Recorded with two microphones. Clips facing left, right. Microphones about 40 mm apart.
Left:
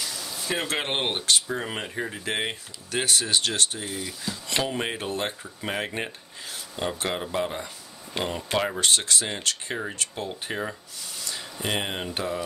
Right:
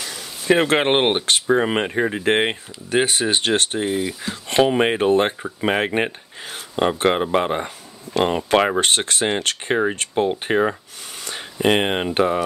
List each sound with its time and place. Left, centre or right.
0.5 s speech: right
2.9 s speech: right